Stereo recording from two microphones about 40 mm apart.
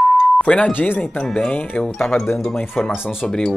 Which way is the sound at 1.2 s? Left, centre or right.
Centre.